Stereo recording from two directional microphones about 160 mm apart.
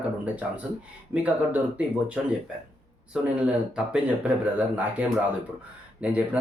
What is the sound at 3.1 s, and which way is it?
Speech, 5° right (ahead or behind).